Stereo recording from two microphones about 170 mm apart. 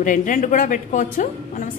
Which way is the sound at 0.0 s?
50° left (ahead or behind).